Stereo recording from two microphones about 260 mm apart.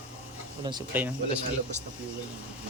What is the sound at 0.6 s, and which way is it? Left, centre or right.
Speech, centre.